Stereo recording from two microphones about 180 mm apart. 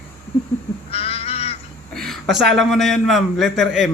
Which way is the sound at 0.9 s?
35° left (ahead or behind).